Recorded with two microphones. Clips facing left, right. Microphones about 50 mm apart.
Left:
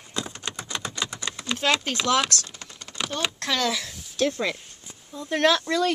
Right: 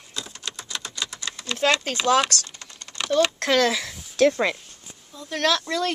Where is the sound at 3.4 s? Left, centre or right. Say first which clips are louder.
Right 6 dB; right.